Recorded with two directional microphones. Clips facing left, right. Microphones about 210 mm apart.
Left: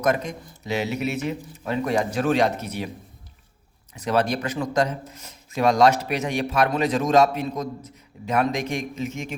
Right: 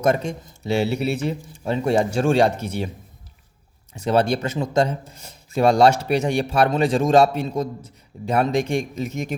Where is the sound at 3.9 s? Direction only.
30° right (ahead or behind).